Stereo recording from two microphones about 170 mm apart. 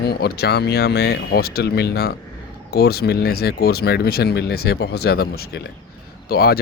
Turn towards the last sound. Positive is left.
turn(degrees=65)  # may be behind; listen again after turning